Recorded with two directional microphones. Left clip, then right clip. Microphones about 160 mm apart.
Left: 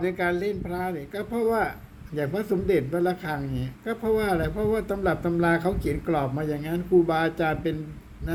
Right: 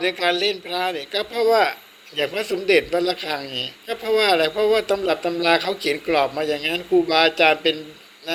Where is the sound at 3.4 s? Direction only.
50° right (ahead or behind).